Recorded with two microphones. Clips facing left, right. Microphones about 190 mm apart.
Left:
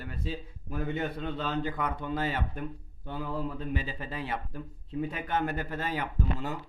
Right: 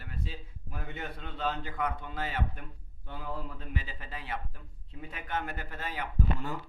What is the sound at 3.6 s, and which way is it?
Speech, 30° left (ahead or behind).